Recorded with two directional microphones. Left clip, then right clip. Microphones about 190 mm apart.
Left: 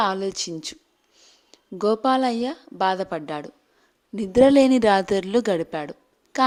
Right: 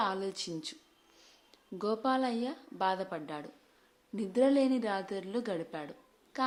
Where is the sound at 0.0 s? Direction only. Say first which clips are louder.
Left 10 dB; 40° left (ahead or behind).